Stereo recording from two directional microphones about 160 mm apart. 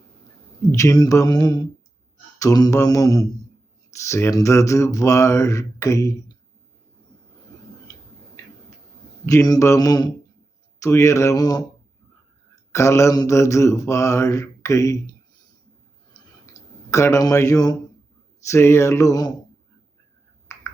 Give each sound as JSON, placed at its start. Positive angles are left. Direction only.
{"t": 0.7, "sound": "mantra", "side_deg": 20}
{"t": 7.9, "sound": "tick-tock", "side_deg": 20}
{"t": 9.3, "sound": "mantra", "side_deg": 20}
{"t": 12.7, "sound": "mantra", "side_deg": 20}
{"t": 16.9, "sound": "mantra", "side_deg": 20}
{"t": 18.4, "sound": "a sound", "side_deg": 15}
{"t": 20.5, "sound": "finger snapping", "side_deg": 15}